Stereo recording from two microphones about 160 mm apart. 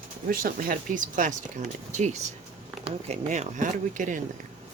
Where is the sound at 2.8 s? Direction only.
45° right (ahead or behind).